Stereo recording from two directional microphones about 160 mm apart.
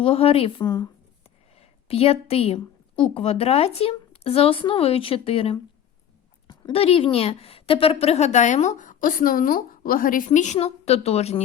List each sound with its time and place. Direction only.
0.0 s a woman's voice: 35° left (ahead or behind)
0.6 s speech: 25° left (ahead or behind)
1.5 s a woman's voice: 40° left (ahead or behind)